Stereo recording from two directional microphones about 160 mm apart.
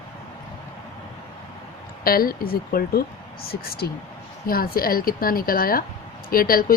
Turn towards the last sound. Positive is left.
turn(degrees=65)  # may be behind; listen again after turning